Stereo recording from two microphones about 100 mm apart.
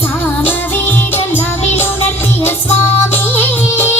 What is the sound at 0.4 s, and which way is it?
Music, 20° left (ahead or behind).